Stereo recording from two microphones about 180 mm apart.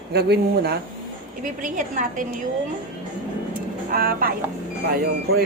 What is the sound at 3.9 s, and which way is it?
Speech, 55° right (ahead or behind).